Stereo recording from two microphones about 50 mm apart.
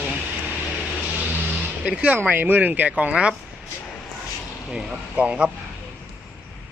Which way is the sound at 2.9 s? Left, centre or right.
Right.